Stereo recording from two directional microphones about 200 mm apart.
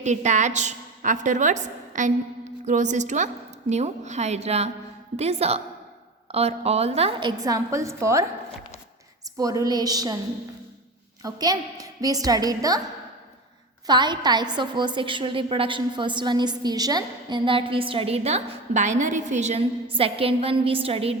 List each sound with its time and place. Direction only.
0.0 s a woman's voice: 35° right (ahead or behind); by 8.2 s 15° right (ahead or behind)
9.4 s a woman's voice: 15° right (ahead or behind)
11.2 s a woman's voice: 20° right (ahead or behind)
13.8 s a woman's voice: 20° right (ahead or behind)